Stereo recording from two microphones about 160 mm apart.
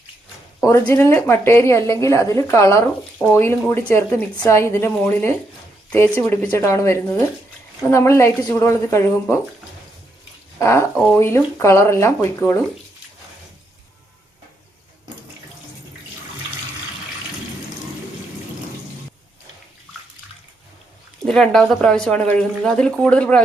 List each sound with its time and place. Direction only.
0.6 s a woman's voice: 15° left (ahead or behind)
10.6 s a woman's voice: 15° left (ahead or behind)
21.2 s speech: 5° left (ahead or behind)